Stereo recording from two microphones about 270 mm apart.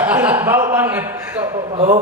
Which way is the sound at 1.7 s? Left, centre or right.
Right.